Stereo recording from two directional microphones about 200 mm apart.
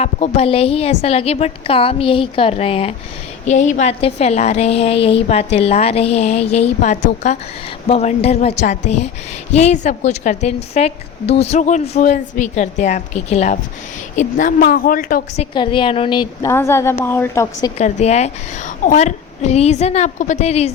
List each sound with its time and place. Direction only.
0.0 s a woman's voice: 30° left (ahead or behind)
15.5 s a woman's voice: 25° left (ahead or behind)
17.7 s a woman's voice: 35° left (ahead or behind)